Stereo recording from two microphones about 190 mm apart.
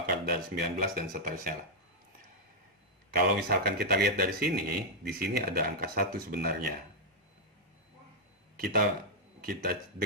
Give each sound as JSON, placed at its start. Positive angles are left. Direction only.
{"t": 0.0, "sound": "speech", "side_deg": -50}
{"t": 3.1, "sound": "speech", "side_deg": -55}
{"t": 8.5, "sound": "speech", "side_deg": -50}